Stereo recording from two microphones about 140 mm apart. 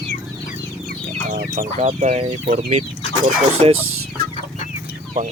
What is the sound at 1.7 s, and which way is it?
Speech, 55° right (ahead or behind).